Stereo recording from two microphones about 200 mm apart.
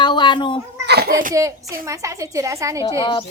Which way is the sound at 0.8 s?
55° right (ahead or behind).